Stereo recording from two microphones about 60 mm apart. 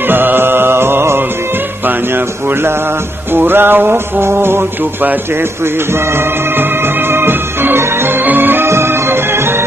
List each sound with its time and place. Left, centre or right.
0.1 s mantra: right
1.9 s music: right
7.1 s music: right
8.6 s music: right